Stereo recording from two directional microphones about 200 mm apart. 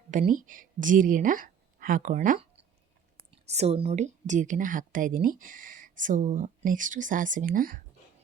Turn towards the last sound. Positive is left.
turn(degrees=-45)  # may be behind; listen again after turning